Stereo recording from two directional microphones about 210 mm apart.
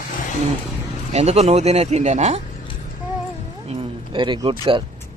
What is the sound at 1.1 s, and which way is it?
Speech, 30° right (ahead or behind).